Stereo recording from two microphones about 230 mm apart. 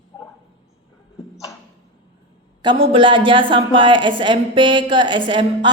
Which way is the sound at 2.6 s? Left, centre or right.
Right.